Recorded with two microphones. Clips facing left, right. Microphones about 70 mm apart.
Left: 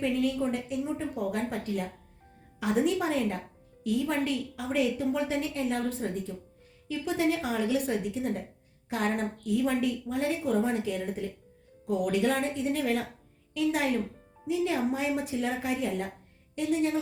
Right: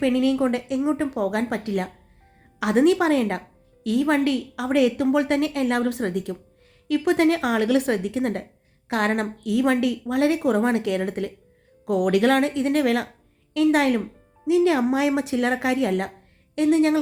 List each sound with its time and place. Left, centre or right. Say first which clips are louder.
0.0 s a woman's voice: right 8 dB; right
3.8 s a woman's voice: right 8 dB; right